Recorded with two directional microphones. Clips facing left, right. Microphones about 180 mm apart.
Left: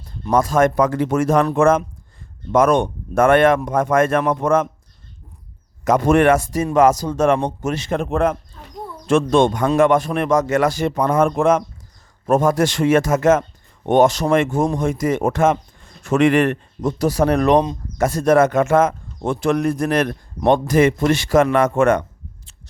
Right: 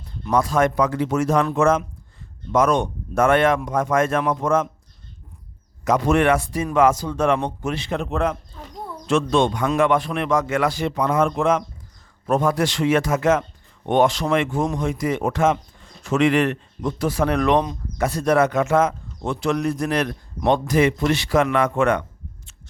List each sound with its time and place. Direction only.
0.3 s speech: 45° left (ahead or behind)
5.8 s speech: 50° left (ahead or behind)